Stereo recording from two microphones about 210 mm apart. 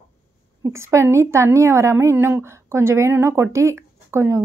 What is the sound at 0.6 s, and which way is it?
A woman's voice, 15° right (ahead or behind).